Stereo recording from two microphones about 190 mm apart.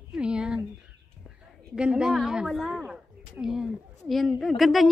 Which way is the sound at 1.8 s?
5° right (ahead or behind).